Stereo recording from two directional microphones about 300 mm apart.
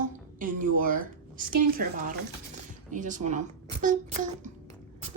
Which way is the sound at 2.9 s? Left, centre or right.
Right.